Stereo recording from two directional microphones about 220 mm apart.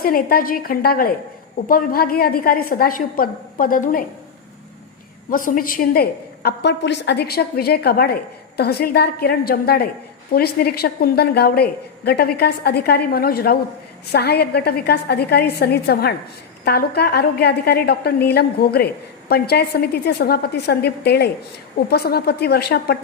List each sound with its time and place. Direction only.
0.0 s a woman's voice: 40° left (ahead or behind)
5.3 s a woman's voice: 40° left (ahead or behind)